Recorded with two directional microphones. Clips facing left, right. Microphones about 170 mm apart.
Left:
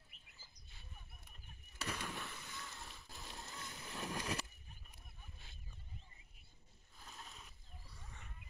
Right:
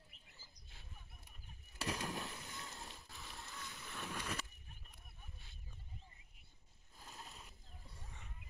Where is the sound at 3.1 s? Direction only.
40° left (ahead or behind).